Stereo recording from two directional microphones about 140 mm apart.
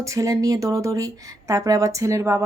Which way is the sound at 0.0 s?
25° right (ahead or behind).